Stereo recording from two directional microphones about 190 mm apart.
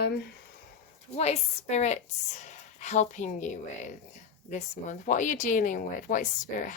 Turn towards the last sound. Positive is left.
turn(degrees=45)  # may be behind; listen again after turning